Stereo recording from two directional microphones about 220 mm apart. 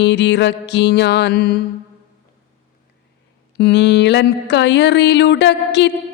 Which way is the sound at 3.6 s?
50° left (ahead or behind).